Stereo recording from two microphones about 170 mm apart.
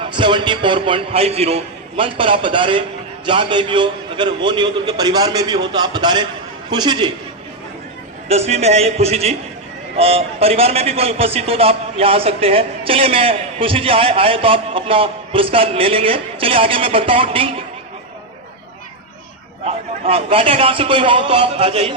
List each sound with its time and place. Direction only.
0.0 s a man's voice: 30° right (ahead or behind)
8.3 s a man's voice: 40° right (ahead or behind)
19.6 s a man's voice: 35° right (ahead or behind)